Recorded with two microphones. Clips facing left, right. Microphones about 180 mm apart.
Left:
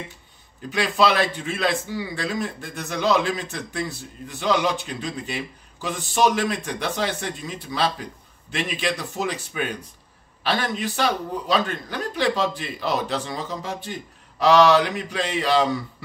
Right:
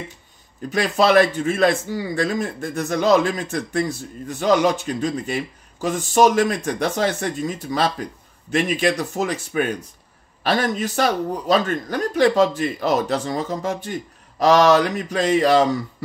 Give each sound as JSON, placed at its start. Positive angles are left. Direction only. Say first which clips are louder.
{"t": 0.7, "sound": "speech", "louder": "right 3 dB", "side_deg": -45}